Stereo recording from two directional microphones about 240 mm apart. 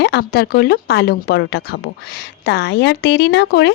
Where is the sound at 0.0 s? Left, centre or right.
Left.